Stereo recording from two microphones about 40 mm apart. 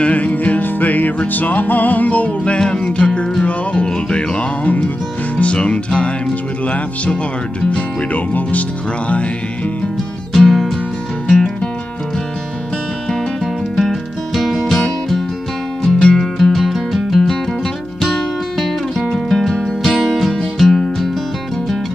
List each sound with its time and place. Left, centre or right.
0.0 s music: left
8.1 s speech: left
10.3 s music: centre
11.2 s music: centre
13.7 s music: centre
15.8 s music: left
16.2 s music: centre
18.6 s music: centre
19.9 s music: centre